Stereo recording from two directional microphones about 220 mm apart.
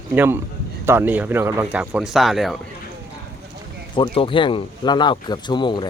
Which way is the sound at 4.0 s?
25° left (ahead or behind).